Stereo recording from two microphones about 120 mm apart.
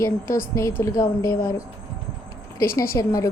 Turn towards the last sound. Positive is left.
turn(degrees=30)  # may be behind; listen again after turning